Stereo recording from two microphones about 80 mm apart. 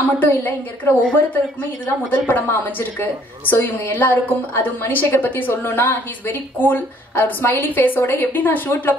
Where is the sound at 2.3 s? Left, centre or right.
Left.